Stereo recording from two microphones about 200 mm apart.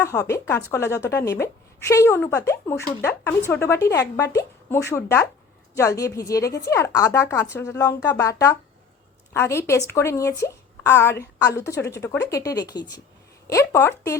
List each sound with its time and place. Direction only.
0.0 s a woman's voice: 15° left (ahead or behind)